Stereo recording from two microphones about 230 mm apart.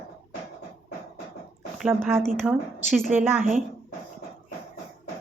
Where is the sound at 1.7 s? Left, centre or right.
Centre.